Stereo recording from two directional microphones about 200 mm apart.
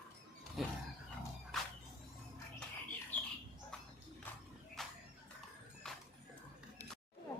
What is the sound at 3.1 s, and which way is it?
Squawk, 5° left (ahead or behind).